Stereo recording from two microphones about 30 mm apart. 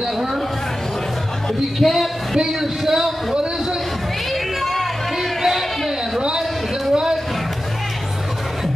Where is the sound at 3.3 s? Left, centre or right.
Right.